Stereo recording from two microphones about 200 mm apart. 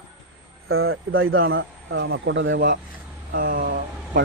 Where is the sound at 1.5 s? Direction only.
70° right (ahead or behind).